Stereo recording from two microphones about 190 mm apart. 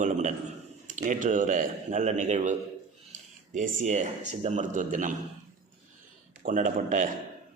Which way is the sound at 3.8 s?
40° right (ahead or behind).